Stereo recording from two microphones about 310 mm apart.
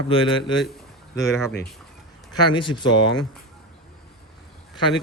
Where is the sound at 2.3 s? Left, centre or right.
Centre.